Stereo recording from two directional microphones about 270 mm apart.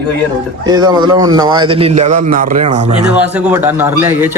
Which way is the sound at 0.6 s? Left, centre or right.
Centre.